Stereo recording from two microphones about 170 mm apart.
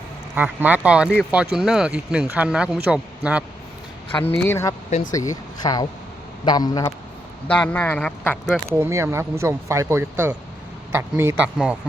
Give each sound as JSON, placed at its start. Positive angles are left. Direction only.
{"t": 0.3, "sound": "speech", "side_deg": -10}
{"t": 4.2, "sound": "speech", "side_deg": 10}
{"t": 7.4, "sound": "speech", "side_deg": 5}
{"t": 8.7, "sound": "speech", "side_deg": -15}